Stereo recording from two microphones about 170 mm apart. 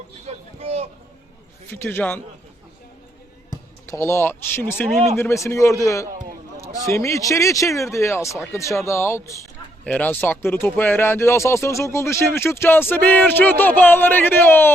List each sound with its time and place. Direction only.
0.3 s a sound: 40° right (ahead or behind)
1.7 s speech: 10° left (ahead or behind)
3.5 s speech: 15° left (ahead or behind)